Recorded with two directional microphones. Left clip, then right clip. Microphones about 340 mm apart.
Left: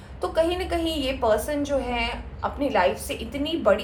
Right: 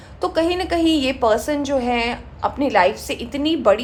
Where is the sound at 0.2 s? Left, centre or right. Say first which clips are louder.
Right 4 dB; right.